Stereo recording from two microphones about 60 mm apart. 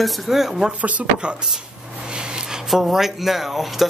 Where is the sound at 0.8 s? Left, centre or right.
Right.